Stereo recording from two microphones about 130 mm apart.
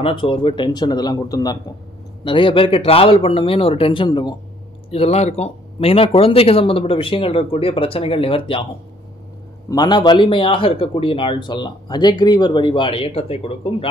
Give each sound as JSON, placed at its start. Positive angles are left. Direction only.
{"t": 0.0, "sound": "speech", "side_deg": 40}
{"t": 2.2, "sound": "speech", "side_deg": 40}
{"t": 4.9, "sound": "speech", "side_deg": 55}
{"t": 9.7, "sound": "speech", "side_deg": 35}